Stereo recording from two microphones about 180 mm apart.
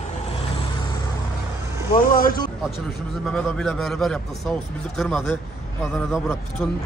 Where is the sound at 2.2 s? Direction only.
50° left (ahead or behind).